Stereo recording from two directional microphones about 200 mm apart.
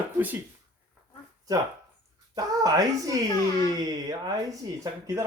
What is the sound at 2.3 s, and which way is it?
Speech, 20° right (ahead or behind).